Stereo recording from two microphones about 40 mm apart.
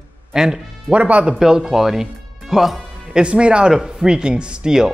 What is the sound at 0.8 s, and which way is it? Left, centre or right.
Speech, right.